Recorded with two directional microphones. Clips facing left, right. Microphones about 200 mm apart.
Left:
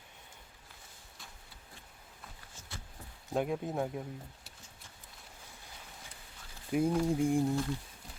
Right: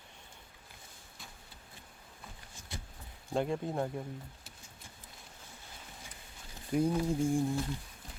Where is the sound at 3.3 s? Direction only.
5° left (ahead or behind).